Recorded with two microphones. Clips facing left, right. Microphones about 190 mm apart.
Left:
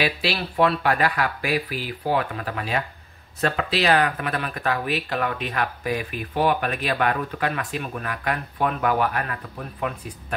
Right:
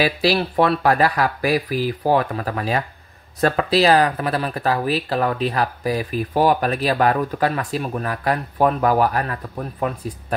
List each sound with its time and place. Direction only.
0.0 s speech: 40° right (ahead or behind)